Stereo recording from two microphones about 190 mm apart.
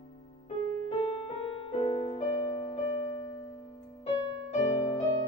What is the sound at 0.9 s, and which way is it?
Music, 30° left (ahead or behind).